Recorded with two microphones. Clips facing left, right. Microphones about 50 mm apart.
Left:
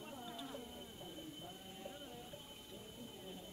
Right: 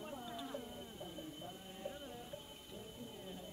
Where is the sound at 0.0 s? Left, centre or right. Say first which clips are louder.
Right 3 dB; centre.